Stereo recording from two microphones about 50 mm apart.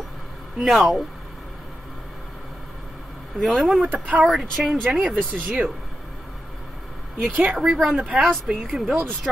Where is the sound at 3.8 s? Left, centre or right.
Right.